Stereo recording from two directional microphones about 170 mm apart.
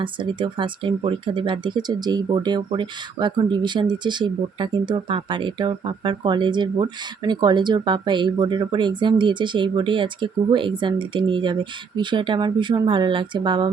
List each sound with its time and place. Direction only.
0.0 s speech: 30° right (ahead or behind)